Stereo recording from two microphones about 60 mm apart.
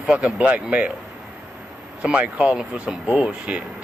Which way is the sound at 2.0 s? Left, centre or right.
Centre.